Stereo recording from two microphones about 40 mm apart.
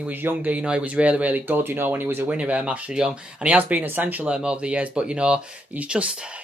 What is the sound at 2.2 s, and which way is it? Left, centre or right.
Speech, right.